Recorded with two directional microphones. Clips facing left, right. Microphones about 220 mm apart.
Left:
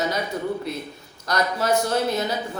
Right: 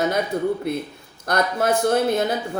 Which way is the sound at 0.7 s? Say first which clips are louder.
Right 5 dB; 55° right (ahead or behind).